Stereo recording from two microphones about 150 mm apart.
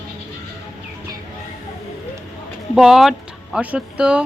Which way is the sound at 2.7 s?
5° right (ahead or behind).